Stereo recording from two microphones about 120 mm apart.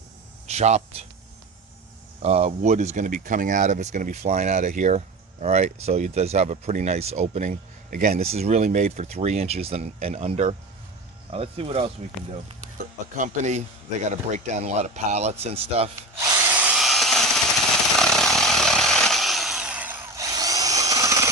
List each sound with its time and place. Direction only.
0.4 s speech: 70° right (ahead or behind)
2.2 s speech: 60° right (ahead or behind)
8.2 s speech: 60° right (ahead or behind)
11.3 s speech: 55° right (ahead or behind)
13.1 s a man's voice: 85° right; by 15.9 s 60° right (ahead or behind)
16.6 s a sound: 10° right (ahead or behind)
16.8 s tools: centre (ahead or behind)
17.9 s chainsaw: 5° left (ahead or behind); by 20.1 s 15° right (ahead or behind)
20.1 s tools: 30° right (ahead or behind)